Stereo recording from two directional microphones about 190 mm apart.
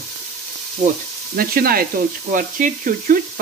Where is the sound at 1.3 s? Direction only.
50° right (ahead or behind).